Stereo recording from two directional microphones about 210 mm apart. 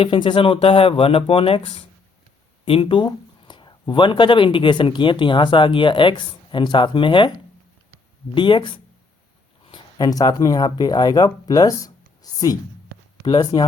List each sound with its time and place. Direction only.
0.0 s speech: 25° left (ahead or behind)
8.4 s speech: 25° left (ahead or behind)